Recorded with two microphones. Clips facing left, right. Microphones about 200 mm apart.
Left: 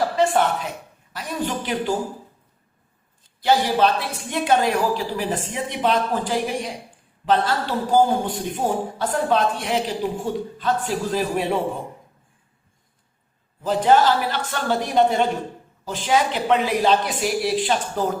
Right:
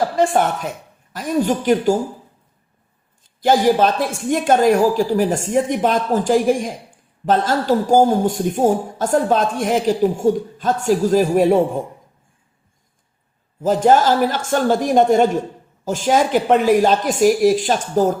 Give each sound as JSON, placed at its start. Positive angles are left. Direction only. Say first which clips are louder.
{"t": 0.2, "sound": "a man's voice", "louder": "right 3 dB", "side_deg": -45}
{"t": 3.4, "sound": "a man's voice", "louder": "right 4 dB", "side_deg": -45}
{"t": 13.6, "sound": "a man's voice", "louder": "right 3 dB", "side_deg": -45}